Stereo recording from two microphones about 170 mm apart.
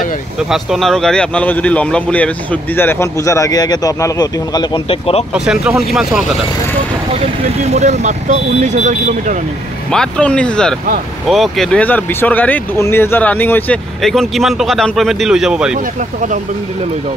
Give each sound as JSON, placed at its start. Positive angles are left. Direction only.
{"t": 0.5, "sound": "speech", "side_deg": 0}
{"t": 5.3, "sound": "speech", "side_deg": -5}
{"t": 7.6, "sound": "speech", "side_deg": -40}
{"t": 9.8, "sound": "speech", "side_deg": 5}
{"t": 15.7, "sound": "speech", "side_deg": -50}